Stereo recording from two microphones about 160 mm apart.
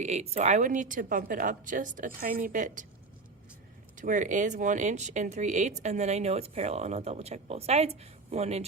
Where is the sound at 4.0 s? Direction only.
50° right (ahead or behind).